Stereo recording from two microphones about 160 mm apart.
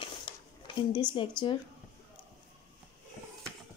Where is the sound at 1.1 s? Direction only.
30° left (ahead or behind).